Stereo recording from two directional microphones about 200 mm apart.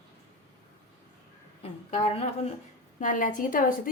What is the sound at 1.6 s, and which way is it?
A woman's voice, 30° left (ahead or behind).